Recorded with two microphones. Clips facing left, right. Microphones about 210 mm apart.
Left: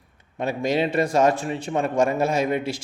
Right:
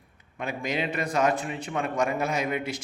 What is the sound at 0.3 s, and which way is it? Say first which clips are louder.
A man's voice: left 7 dB; 35° left (ahead or behind).